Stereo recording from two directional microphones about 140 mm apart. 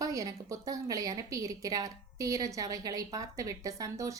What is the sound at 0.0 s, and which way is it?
Speech, 25° right (ahead or behind).